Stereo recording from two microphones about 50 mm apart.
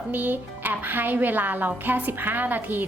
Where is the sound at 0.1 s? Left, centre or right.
Right.